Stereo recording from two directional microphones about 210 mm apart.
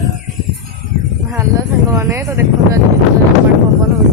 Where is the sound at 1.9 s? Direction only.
10° right (ahead or behind).